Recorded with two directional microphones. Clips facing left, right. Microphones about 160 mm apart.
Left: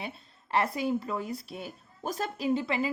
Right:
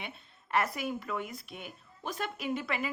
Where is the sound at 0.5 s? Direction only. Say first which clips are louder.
Left 4 dB; 30° left (ahead or behind).